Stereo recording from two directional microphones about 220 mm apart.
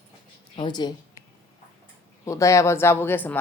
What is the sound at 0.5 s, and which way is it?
Speech, 20° left (ahead or behind).